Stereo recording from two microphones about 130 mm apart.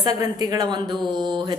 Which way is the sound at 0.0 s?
30° right (ahead or behind).